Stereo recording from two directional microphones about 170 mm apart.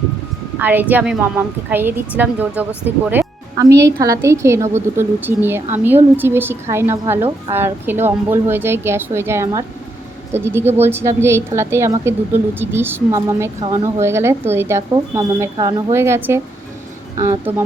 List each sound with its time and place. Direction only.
0.6 s a woman's voice: 10° right (ahead or behind)
13.6 s speech: 40° right (ahead or behind)
14.0 s a woman's voice: 15° right (ahead or behind)